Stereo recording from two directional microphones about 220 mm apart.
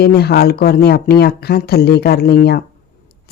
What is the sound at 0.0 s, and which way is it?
Speech, 45° left (ahead or behind).